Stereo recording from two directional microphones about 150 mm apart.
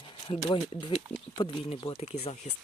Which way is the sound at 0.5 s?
35° left (ahead or behind).